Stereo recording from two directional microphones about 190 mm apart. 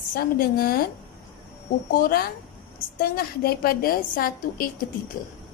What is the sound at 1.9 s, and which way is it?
A woman's voice, 50° left (ahead or behind).